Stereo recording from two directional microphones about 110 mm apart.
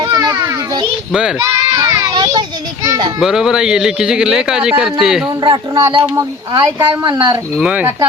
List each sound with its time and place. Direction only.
0.0 s children playing: 35° right (ahead or behind)
1.4 s a child's voice: 30° right (ahead or behind)
2.1 s a child's voice: 45° right (ahead or behind)
2.8 s a child's voice: 30° right (ahead or behind)
3.2 s speech: 5° right (ahead or behind)
5.4 s speech: 45° right (ahead or behind)
7.5 s speech: 10° right (ahead or behind)